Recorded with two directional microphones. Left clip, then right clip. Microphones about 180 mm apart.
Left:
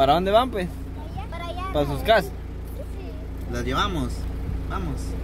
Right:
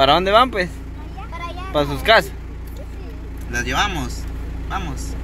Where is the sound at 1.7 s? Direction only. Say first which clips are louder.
Right 5 dB; 5° right (ahead or behind).